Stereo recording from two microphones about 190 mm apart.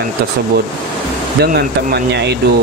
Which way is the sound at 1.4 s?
50° right (ahead or behind).